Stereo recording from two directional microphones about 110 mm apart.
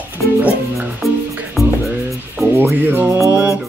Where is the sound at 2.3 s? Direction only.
20° right (ahead or behind).